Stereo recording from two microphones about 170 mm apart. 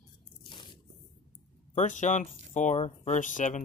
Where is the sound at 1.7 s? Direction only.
45° left (ahead or behind).